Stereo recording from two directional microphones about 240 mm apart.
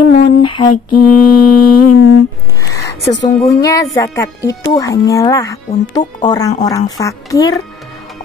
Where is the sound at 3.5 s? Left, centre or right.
Centre.